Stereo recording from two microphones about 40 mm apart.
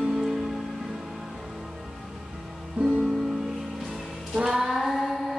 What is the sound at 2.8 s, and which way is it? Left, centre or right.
Music, right.